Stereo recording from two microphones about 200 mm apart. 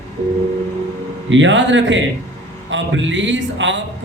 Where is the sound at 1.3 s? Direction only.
70° right (ahead or behind).